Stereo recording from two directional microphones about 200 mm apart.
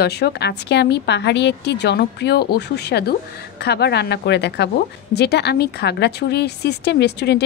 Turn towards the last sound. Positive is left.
turn(degrees=55)  # may be behind; listen again after turning